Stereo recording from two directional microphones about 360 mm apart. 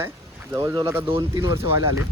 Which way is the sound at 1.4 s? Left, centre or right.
Left.